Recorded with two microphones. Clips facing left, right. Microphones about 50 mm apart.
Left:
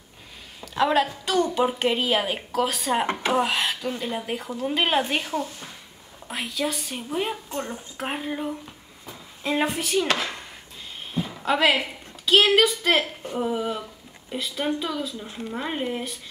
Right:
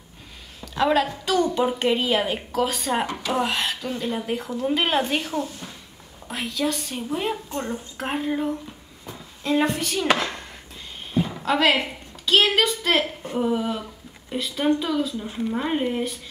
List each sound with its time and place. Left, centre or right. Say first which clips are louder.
0.6 s a woman's voice: right 1 dB; centre
3.1 s speech: left 3 dB; left
3.3 s a woman's voice: right 2 dB; centre
9.0 s a sound: right 1 dB; centre
11.4 s a woman's voice: even; centre